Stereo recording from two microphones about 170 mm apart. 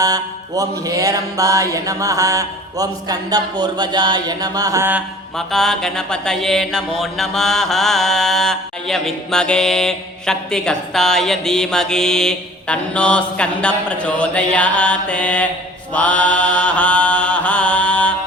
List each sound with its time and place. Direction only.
0.0 s mantra: 20° right (ahead or behind)
5.5 s mantra: 5° left (ahead or behind)